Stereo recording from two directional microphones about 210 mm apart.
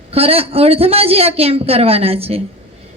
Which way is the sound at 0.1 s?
30° right (ahead or behind).